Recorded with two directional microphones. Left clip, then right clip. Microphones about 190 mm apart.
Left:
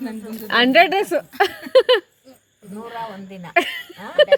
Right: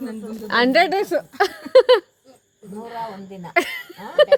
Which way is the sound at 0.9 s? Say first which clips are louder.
Left 1 dB; 15° left (ahead or behind).